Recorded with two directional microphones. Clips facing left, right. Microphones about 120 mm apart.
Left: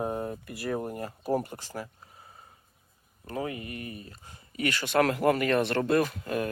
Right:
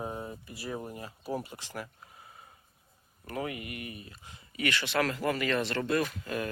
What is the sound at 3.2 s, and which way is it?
Speech, 30° left (ahead or behind).